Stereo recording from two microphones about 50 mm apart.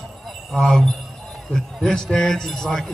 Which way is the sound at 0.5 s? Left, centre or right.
Centre.